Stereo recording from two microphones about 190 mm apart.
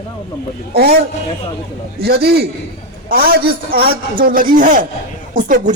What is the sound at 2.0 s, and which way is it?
A man's voice, 55° right (ahead or behind).